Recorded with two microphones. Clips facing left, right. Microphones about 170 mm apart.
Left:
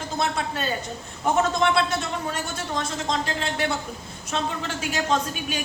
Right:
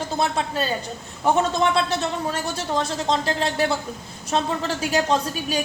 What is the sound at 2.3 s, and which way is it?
A woman's voice, 35° right (ahead or behind).